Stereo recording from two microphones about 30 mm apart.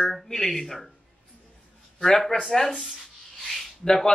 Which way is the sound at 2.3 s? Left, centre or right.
Left.